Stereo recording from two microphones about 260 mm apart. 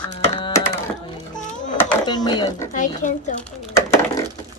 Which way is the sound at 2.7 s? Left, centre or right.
Left.